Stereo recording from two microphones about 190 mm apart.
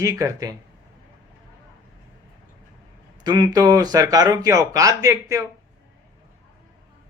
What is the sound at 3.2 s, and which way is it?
Speech, 20° right (ahead or behind).